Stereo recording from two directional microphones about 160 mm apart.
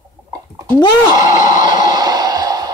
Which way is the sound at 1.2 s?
25° right (ahead or behind).